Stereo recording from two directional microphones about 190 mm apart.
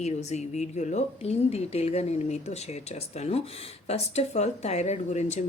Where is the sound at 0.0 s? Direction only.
35° left (ahead or behind).